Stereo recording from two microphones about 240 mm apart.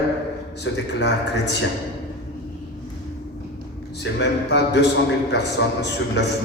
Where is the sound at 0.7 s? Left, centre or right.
Left.